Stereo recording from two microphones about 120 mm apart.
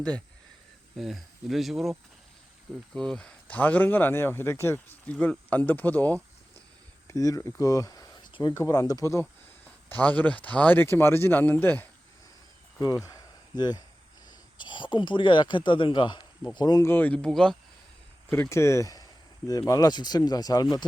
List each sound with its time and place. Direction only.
0.9 s speech: centre (ahead or behind)
7.1 s speech: 25° left (ahead or behind)
8.3 s a sound: 40° left (ahead or behind)
8.5 s speech: 25° left (ahead or behind)
9.9 s speech: 15° left (ahead or behind)
12.8 s speech: 30° left (ahead or behind)
16.8 s speech: 15° left (ahead or behind)
18.3 s speech: 20° left (ahead or behind)